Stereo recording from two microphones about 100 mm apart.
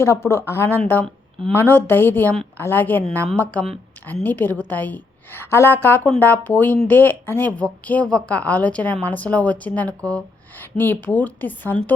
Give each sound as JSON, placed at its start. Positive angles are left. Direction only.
{"t": 0.0, "sound": "a woman's voice", "side_deg": 30}